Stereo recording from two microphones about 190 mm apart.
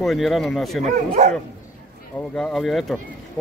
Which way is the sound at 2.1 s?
5° left (ahead or behind).